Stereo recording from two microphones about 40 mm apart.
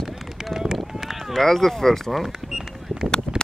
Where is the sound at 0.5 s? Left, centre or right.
Centre.